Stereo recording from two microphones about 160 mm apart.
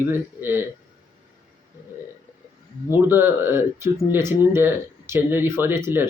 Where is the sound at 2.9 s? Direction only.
15° right (ahead or behind).